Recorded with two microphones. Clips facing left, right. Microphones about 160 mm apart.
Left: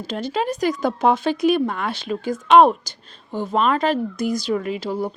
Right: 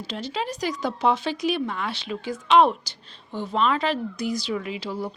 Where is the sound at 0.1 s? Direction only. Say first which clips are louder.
Left 7 dB; 50° left (ahead or behind).